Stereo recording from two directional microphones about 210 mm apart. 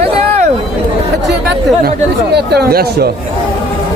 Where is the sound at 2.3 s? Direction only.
50° right (ahead or behind).